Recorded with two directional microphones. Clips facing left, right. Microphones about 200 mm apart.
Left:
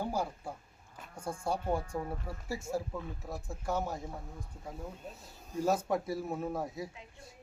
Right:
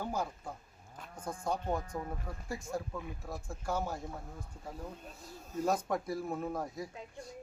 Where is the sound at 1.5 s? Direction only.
10° left (ahead or behind).